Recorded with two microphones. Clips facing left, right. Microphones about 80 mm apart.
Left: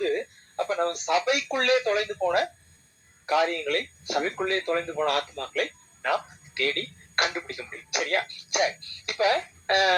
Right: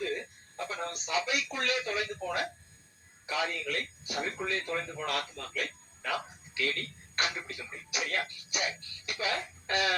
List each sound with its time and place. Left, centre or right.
0.0 s speech: left